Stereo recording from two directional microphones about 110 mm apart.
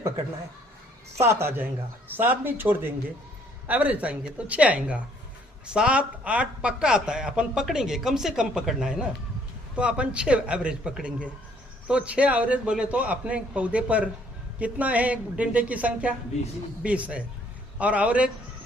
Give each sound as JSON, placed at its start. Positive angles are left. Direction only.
{"t": 1.2, "sound": "speech", "side_deg": -25}